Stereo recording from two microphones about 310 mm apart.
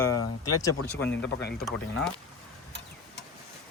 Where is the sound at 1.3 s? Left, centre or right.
Left.